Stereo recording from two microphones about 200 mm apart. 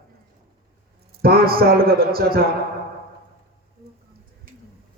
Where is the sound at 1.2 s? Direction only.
50° right (ahead or behind).